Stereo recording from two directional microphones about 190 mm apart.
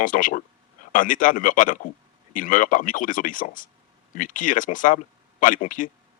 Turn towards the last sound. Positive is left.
turn(degrees=45)  # may be behind; listen again after turning